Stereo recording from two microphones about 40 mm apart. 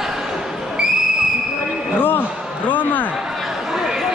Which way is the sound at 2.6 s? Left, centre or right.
Left.